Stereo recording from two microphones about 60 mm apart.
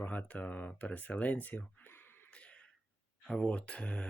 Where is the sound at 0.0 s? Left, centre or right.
Left.